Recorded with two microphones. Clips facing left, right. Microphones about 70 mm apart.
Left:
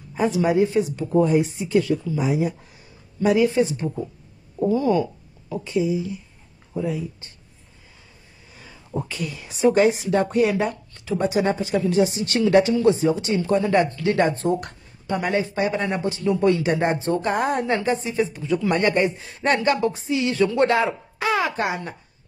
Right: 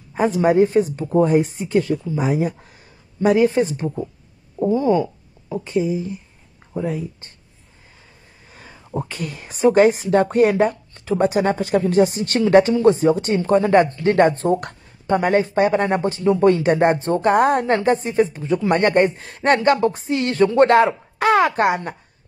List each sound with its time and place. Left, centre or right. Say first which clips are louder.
0.1 s speech: right 4 dB; right
4.6 s speech: right 2 dB; right
5.5 s speech: right 2 dB; right
8.5 s speech: right 2 dB; right
15.0 s speech: right 6 dB; right
18.8 s speech: right 4 dB; right